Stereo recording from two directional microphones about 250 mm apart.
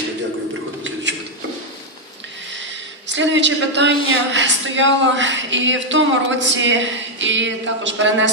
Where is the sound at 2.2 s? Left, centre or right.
Right.